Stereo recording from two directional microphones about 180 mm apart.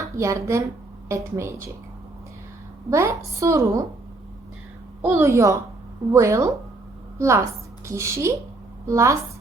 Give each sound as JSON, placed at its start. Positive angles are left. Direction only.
{"t": 0.0, "sound": "a woman's voice", "side_deg": -15}
{"t": 2.9, "sound": "a woman's voice", "side_deg": -15}
{"t": 5.2, "sound": "a woman's voice", "side_deg": -15}